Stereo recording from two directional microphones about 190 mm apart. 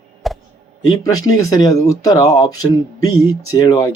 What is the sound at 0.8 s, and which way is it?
Speech, 20° left (ahead or behind).